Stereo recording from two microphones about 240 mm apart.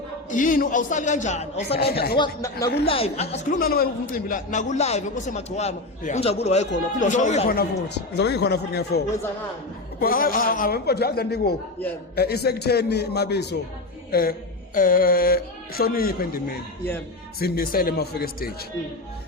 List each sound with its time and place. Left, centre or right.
0.3 s speech: left
1.8 s speech: left
2.1 s a man's voice: centre; by 16.4 s left
17.4 s speech: left